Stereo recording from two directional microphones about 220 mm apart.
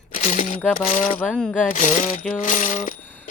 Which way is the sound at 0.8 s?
30° left (ahead or behind).